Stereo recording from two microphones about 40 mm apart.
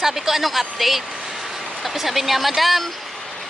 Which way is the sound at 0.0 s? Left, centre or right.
Centre.